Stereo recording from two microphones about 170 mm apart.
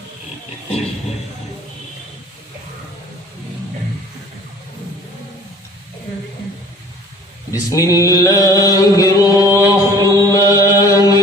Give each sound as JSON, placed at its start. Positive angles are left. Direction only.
{"t": 7.5, "sound": "a sound", "side_deg": 20}
{"t": 9.5, "sound": "chant", "side_deg": -15}
{"t": 10.0, "sound": "chant", "side_deg": 20}